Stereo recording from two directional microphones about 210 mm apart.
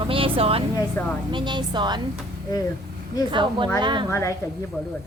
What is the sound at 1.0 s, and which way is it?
Speech, 10° left (ahead or behind).